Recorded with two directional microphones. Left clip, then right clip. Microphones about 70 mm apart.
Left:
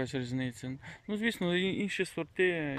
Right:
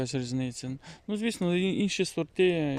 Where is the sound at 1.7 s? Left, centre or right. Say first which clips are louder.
Right 4 dB; right.